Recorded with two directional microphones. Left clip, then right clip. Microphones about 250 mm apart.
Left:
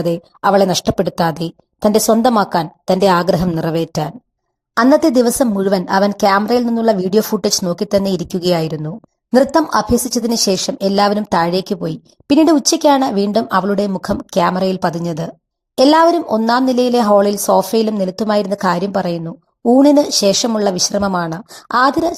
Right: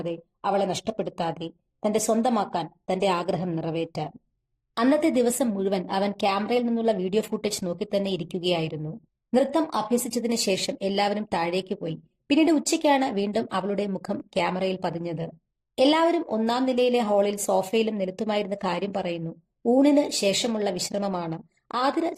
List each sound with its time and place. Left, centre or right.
0.0 s a woman's voice: left